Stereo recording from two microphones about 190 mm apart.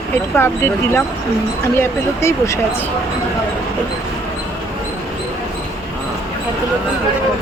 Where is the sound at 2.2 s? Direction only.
15° left (ahead or behind).